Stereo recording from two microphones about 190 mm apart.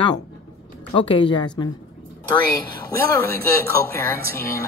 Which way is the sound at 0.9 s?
25° left (ahead or behind).